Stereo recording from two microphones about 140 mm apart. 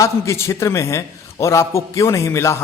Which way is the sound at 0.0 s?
20° left (ahead or behind).